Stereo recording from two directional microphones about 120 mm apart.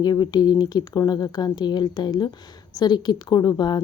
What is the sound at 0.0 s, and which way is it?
Speech, 35° left (ahead or behind).